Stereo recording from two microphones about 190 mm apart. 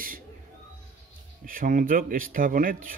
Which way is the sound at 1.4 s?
45° right (ahead or behind).